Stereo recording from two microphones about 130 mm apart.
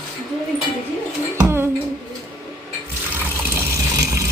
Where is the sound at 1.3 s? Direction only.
20° right (ahead or behind).